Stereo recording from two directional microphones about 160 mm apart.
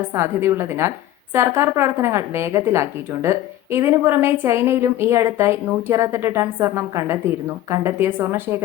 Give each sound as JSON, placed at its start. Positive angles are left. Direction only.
{"t": 0.1, "sound": "a woman's voice", "side_deg": -15}